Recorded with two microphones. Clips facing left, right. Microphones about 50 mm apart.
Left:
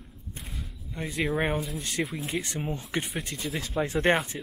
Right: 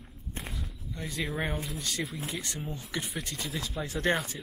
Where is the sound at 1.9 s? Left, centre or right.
Centre.